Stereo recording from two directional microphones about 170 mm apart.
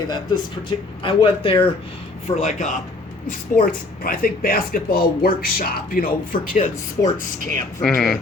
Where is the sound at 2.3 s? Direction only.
40° left (ahead or behind).